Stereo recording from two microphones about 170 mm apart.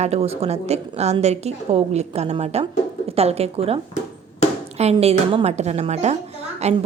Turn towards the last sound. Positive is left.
turn(degrees=-40)  # may be behind; listen again after turning